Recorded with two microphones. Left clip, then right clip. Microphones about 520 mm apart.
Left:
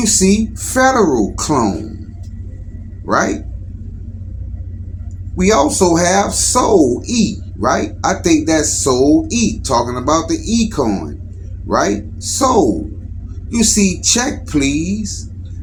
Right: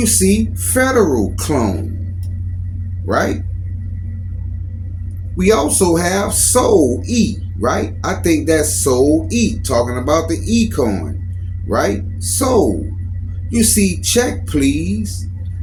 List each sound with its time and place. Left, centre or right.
0.5 s speech: right
3.1 s speech: right
5.4 s speech: right